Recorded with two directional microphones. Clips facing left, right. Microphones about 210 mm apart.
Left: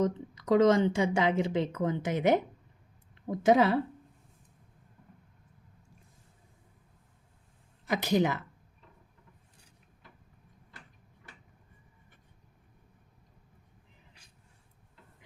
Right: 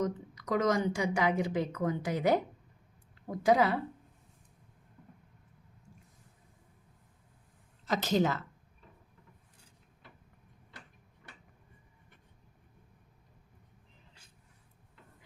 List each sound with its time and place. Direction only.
0.0 s a woman's voice: 30° left (ahead or behind)
3.4 s a woman's voice: 25° left (ahead or behind)
7.9 s speech: 15° left (ahead or behind)